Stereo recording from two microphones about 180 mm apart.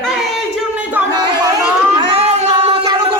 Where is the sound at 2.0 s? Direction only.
30° right (ahead or behind).